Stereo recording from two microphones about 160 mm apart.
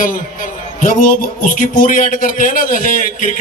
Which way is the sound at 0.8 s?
55° left (ahead or behind).